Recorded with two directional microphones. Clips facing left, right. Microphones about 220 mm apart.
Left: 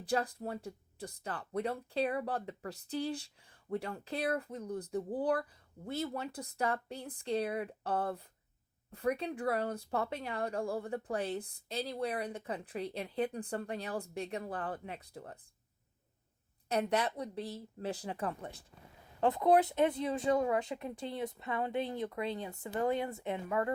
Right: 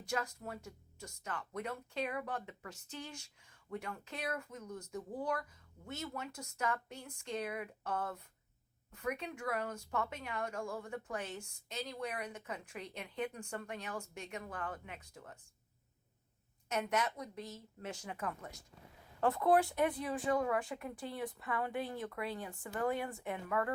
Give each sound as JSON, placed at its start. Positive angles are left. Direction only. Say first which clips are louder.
{"t": 0.0, "sound": "speech", "louder": "left 6 dB", "side_deg": 35}
{"t": 16.6, "sound": "speech", "louder": "left 4 dB", "side_deg": 35}
{"t": 19.2, "sound": "speech", "louder": "left 3 dB", "side_deg": 20}